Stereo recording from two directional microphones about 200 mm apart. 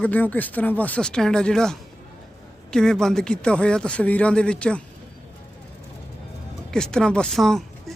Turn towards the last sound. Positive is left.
turn(degrees=0)  # may be behind; listen again after turning